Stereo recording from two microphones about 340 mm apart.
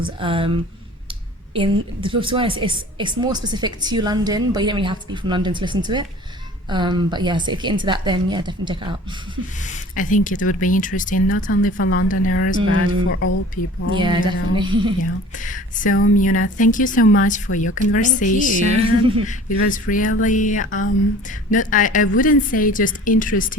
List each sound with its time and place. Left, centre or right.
0.0 s a woman's voice: centre
1.5 s a woman's voice: centre
9.6 s a woman's voice: left
11.8 s speech: left
13.6 s speech: left
13.9 s a woman's voice: centre
15.4 s a woman's voice: left
18.6 s a woman's voice: centre
19.6 s a woman's voice: left